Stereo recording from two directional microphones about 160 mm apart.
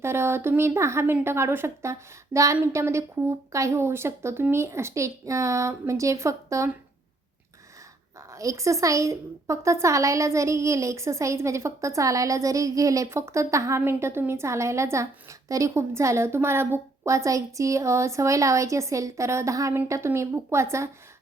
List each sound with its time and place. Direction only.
0.0 s a woman's voice: 15° right (ahead or behind)
8.3 s a woman's voice: 20° right (ahead or behind)